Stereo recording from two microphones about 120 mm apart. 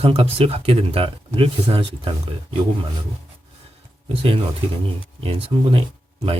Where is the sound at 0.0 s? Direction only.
55° right (ahead or behind).